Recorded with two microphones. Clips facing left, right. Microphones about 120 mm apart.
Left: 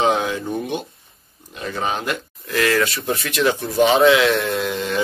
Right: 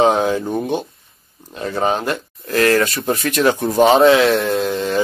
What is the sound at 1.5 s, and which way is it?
Speech, 35° right (ahead or behind).